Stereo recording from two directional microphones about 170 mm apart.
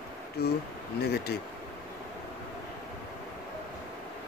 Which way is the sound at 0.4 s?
70° left (ahead or behind).